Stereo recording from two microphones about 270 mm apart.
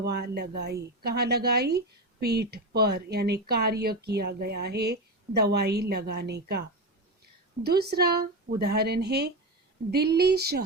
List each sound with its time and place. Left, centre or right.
0.0 s speech: right